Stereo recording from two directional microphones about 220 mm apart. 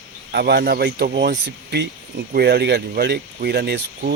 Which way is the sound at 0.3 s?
50° right (ahead or behind).